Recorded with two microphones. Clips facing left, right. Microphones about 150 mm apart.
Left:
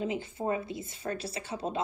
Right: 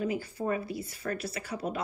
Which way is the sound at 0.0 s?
25° left (ahead or behind).